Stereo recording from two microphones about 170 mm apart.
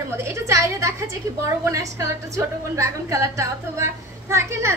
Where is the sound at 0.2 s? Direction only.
15° right (ahead or behind).